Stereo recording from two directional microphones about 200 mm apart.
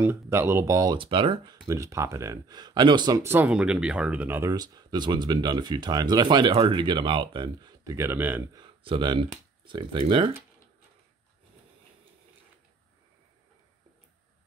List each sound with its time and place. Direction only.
0.0 s speech: 10° right (ahead or behind)
8.6 s speech: 25° right (ahead or behind)